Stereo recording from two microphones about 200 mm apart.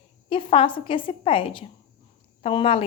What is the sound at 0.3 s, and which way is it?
A woman's voice, 25° left (ahead or behind).